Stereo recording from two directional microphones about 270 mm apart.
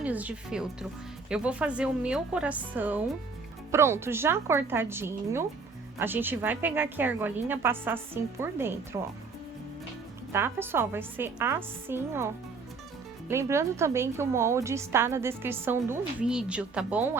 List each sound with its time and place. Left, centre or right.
0.0 s a woman's voice: centre
10.3 s a woman's voice: centre